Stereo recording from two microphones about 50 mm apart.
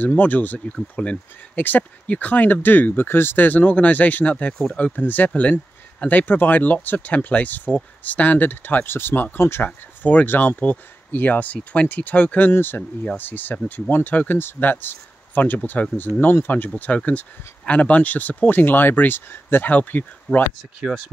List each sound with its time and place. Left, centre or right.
0.0 s speech: left
0.9 s speech: left
1.6 s speech: left
19.7 s speech: left